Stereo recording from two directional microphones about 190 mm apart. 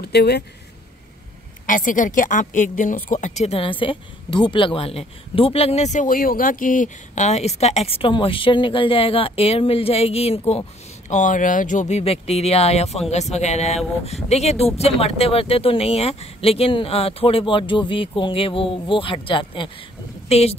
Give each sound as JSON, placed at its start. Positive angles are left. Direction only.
{"t": 0.0, "sound": "speech", "side_deg": 60}
{"t": 1.7, "sound": "a woman's voice", "side_deg": 45}